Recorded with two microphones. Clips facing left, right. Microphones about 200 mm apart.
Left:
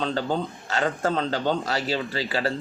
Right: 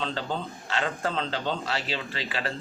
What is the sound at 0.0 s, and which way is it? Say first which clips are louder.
A man's voice: left 5 dB; 40° left (ahead or behind).